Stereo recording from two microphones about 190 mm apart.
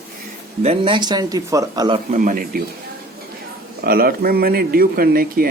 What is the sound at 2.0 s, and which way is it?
Speech, 45° right (ahead or behind).